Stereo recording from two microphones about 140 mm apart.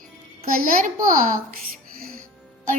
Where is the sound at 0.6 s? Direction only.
75° right (ahead or behind).